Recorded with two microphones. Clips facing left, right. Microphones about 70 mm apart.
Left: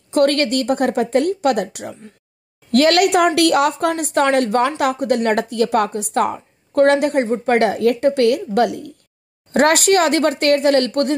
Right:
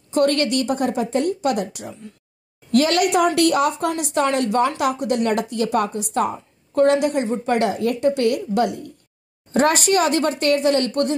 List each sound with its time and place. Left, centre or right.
0.1 s speech: left
3.9 s a woman's voice: left